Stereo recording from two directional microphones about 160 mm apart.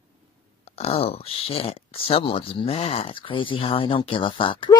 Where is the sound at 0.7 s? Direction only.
40° left (ahead or behind).